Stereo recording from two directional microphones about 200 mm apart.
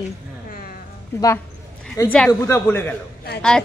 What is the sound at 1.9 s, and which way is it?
A man's voice, 15° left (ahead or behind).